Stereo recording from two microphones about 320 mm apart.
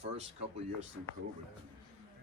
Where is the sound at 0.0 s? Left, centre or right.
Centre.